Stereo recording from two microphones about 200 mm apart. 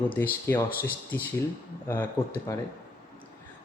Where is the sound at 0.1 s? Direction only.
10° left (ahead or behind).